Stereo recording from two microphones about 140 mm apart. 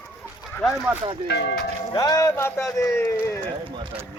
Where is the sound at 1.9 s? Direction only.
30° left (ahead or behind).